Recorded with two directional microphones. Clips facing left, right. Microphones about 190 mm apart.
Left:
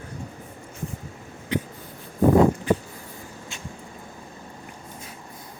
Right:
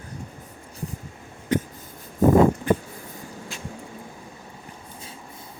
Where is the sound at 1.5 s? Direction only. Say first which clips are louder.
Right 3 dB; 45° right (ahead or behind).